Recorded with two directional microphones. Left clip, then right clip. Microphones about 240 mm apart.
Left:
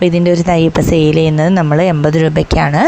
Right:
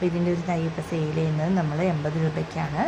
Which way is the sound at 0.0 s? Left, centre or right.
Left.